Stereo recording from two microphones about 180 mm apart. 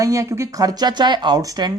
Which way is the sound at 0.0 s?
20° right (ahead or behind).